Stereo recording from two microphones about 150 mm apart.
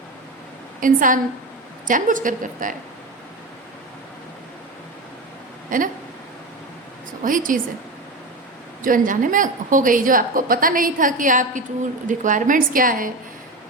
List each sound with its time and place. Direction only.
0.8 s a woman's voice: 65° right (ahead or behind)
5.7 s a woman's voice: 60° right (ahead or behind)
7.3 s a woman's voice: 65° right (ahead or behind)
8.8 s a woman's voice: 65° right (ahead or behind)